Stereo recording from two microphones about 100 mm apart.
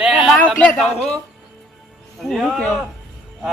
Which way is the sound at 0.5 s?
10° left (ahead or behind).